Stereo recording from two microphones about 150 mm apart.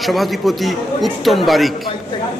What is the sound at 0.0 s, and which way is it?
A man's voice, centre (ahead or behind).